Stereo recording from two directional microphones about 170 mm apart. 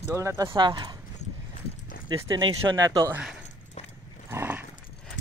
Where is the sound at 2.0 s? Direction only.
25° right (ahead or behind).